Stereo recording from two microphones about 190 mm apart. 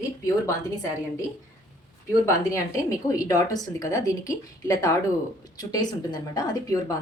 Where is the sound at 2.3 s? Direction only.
15° left (ahead or behind).